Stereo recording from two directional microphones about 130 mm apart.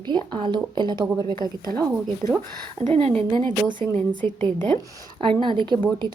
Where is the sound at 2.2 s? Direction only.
65° right (ahead or behind).